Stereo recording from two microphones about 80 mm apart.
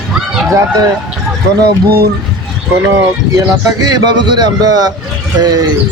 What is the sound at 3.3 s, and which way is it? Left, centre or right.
Speech, right.